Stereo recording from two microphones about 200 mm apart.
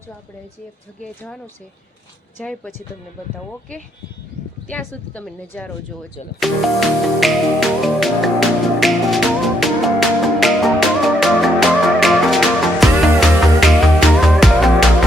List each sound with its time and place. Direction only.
1.0 s speech: 5° left (ahead or behind)
2.4 s a woman's voice: 5° left (ahead or behind)
4.7 s music: 10° left (ahead or behind)